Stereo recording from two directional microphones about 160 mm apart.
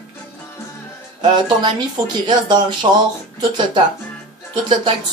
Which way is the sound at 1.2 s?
30° right (ahead or behind).